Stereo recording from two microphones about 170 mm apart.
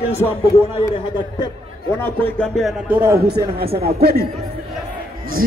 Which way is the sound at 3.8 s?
70° right (ahead or behind).